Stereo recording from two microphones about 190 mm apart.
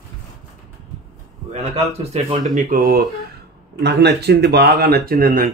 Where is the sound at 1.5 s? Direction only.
35° right (ahead or behind).